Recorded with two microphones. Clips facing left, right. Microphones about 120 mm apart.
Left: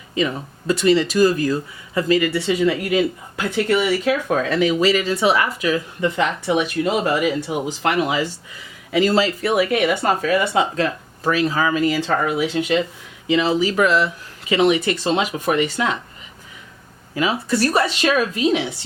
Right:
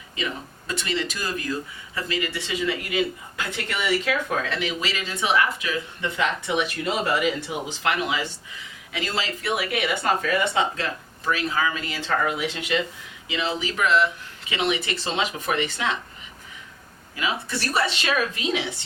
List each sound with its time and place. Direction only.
0.7 s speech: 35° left (ahead or behind)
10.8 s speech: 40° left (ahead or behind)
17.2 s speech: 40° left (ahead or behind)